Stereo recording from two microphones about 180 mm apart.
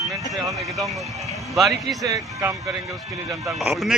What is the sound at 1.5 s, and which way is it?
Speech, centre (ahead or behind).